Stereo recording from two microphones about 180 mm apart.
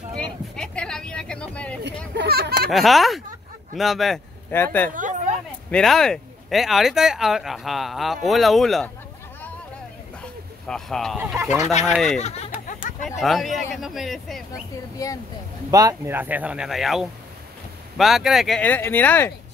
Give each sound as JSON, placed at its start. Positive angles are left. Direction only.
{"t": 0.1, "sound": "a sound", "side_deg": 5}
{"t": 2.1, "sound": "a sound", "side_deg": -65}
{"t": 2.7, "sound": "speech", "side_deg": 0}
{"t": 4.5, "sound": "speech", "side_deg": 10}
{"t": 5.7, "sound": "speech", "side_deg": 0}
{"t": 10.7, "sound": "speech", "side_deg": 5}
{"t": 11.1, "sound": "speech", "side_deg": -10}
{"t": 11.9, "sound": "speech", "side_deg": 0}
{"t": 12.2, "sound": "speech", "side_deg": 40}
{"t": 12.5, "sound": "chatter", "side_deg": 50}
{"t": 13.1, "sound": "speech", "side_deg": 0}
{"t": 15.0, "sound": "speech", "side_deg": 20}
{"t": 15.7, "sound": "speech", "side_deg": -20}